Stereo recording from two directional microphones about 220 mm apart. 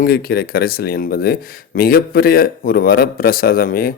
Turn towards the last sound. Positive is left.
turn(degrees=40)  # may be behind; listen again after turning